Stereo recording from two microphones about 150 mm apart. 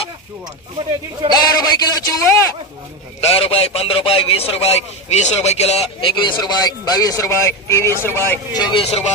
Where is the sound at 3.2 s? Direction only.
40° left (ahead or behind).